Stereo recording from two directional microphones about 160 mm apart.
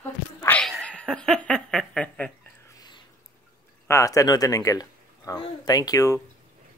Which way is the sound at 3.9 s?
20° left (ahead or behind).